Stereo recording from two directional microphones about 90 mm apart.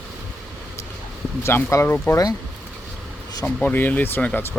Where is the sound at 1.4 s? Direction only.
30° left (ahead or behind).